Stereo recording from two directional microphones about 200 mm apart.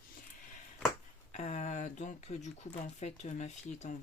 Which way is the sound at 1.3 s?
35° left (ahead or behind).